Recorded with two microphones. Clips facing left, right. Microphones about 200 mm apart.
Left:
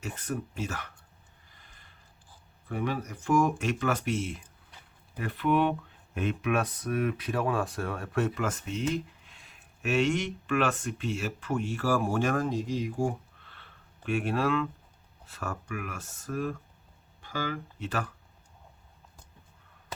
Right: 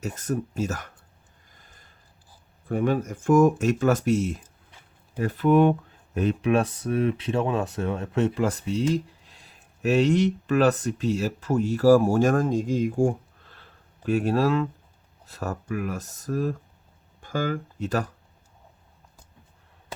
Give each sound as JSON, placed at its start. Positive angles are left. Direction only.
{"t": 0.0, "sound": "speech", "side_deg": -40}
{"t": 1.6, "sound": "a sound", "side_deg": -40}
{"t": 2.6, "sound": "speech", "side_deg": -50}
{"t": 17.2, "sound": "speech", "side_deg": -45}